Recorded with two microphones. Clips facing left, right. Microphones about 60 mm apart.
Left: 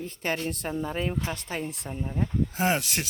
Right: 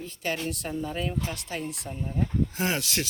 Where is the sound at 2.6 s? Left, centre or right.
Centre.